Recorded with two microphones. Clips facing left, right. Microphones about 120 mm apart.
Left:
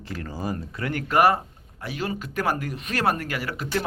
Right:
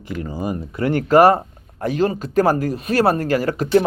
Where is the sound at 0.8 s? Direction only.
35° right (ahead or behind).